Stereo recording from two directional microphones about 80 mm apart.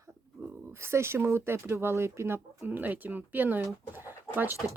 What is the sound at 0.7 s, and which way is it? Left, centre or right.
Speech, right.